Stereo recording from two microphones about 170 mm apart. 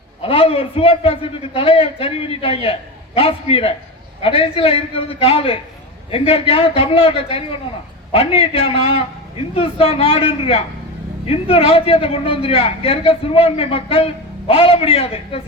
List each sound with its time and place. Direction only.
0.2 s a man's voice: 35° left (ahead or behind)